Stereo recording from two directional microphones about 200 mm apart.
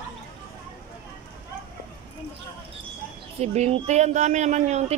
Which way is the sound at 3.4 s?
35° right (ahead or behind).